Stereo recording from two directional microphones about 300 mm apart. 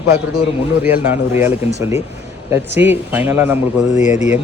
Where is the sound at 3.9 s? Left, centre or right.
Left.